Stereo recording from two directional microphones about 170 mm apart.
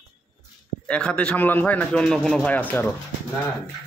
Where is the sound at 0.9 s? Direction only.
5° left (ahead or behind).